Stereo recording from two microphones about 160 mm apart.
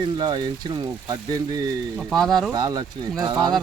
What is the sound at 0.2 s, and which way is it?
Speech, 25° right (ahead or behind).